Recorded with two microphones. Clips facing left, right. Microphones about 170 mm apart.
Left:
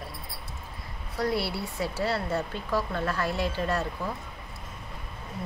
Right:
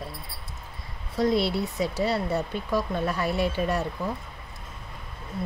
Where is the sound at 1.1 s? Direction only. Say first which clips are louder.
Right 5 dB; 20° right (ahead or behind).